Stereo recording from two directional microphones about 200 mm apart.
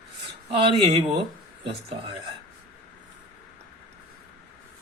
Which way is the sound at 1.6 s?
30° right (ahead or behind).